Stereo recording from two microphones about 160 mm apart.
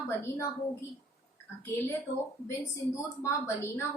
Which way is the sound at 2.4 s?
20° left (ahead or behind).